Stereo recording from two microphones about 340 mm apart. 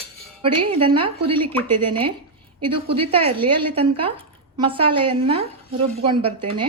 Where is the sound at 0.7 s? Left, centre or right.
Centre.